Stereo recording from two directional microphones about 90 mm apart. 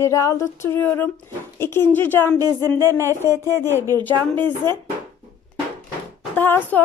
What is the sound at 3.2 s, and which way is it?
A woman's voice, 25° left (ahead or behind).